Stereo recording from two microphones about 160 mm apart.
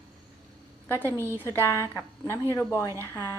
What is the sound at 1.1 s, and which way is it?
Speech, 15° right (ahead or behind).